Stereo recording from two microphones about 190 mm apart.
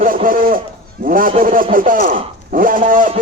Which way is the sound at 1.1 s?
50° right (ahead or behind).